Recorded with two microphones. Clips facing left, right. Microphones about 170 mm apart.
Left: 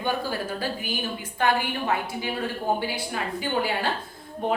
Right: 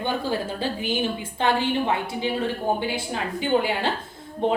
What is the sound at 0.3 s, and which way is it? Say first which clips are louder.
A woman's voice: right 3 dB; 25° right (ahead or behind).